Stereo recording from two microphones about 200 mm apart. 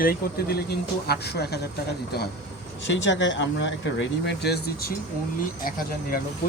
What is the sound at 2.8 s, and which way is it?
Speech, 65° left (ahead or behind).